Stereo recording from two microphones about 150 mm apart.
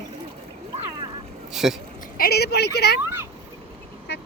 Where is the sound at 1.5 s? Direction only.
5° right (ahead or behind).